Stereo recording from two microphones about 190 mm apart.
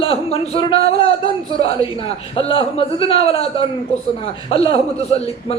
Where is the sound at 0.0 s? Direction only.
30° left (ahead or behind).